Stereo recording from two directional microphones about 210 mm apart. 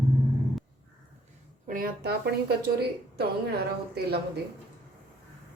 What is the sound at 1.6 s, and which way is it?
Speech, 40° right (ahead or behind).